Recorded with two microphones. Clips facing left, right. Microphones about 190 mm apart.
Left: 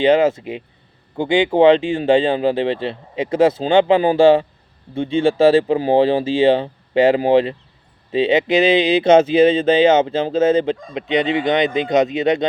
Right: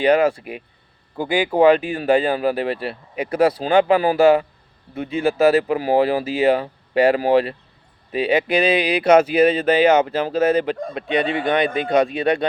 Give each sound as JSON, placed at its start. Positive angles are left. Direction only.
{"t": 0.0, "sound": "speech", "side_deg": 25}